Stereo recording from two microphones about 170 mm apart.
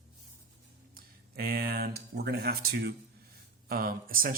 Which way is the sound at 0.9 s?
60° right (ahead or behind).